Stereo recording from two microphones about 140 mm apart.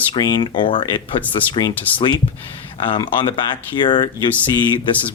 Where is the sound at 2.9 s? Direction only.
35° left (ahead or behind).